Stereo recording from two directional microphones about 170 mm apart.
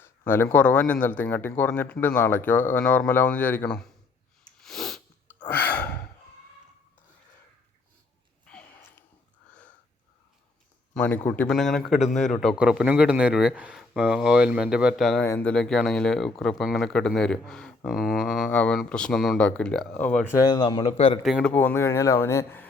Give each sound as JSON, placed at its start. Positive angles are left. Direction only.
{"t": 0.0, "sound": "a man's voice", "side_deg": 10}
{"t": 4.6, "sound": "sneeze", "side_deg": 0}
{"t": 8.4, "sound": "a sound", "side_deg": 5}
{"t": 10.9, "sound": "speech", "side_deg": 5}
{"t": 20.4, "sound": "speech", "side_deg": 25}
{"t": 20.8, "sound": "speech", "side_deg": 35}
{"t": 21.2, "sound": "speech", "side_deg": 0}
{"t": 21.5, "sound": "a man's voice", "side_deg": 10}